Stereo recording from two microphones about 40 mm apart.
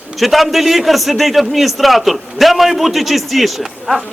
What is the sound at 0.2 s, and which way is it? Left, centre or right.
A man's voice, centre.